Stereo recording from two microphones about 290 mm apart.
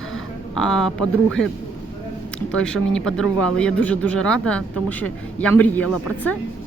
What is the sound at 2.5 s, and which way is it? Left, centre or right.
Speech, centre.